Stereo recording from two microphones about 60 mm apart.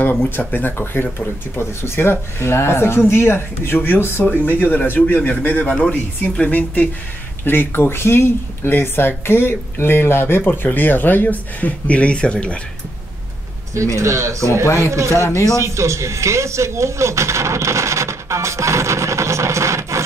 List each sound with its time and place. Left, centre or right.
0.4 s speech: left
13.9 s speech: right